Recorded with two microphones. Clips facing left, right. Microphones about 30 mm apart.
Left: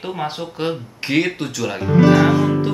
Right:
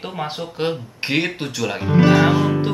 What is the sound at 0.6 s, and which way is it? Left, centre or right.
Speech, centre.